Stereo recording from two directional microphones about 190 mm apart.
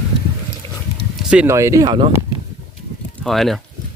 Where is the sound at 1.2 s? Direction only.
5° right (ahead or behind); by 2.1 s 25° right (ahead or behind).